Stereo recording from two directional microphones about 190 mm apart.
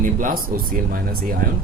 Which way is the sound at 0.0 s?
45° right (ahead or behind).